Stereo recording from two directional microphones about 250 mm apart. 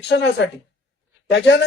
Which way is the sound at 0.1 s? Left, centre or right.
Left.